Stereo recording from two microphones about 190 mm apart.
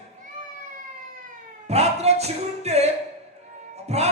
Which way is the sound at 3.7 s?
35° right (ahead or behind).